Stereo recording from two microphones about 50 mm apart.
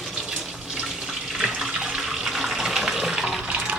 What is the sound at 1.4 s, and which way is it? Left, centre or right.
Water tap, centre.